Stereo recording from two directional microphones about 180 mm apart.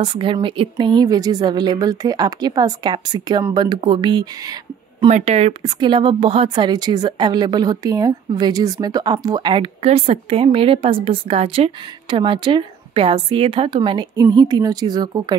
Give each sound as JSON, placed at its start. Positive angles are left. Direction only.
{"t": 0.0, "sound": "a woman's voice", "side_deg": -25}
{"t": 5.0, "sound": "speech", "side_deg": -35}
{"t": 5.6, "sound": "a woman's voice", "side_deg": -25}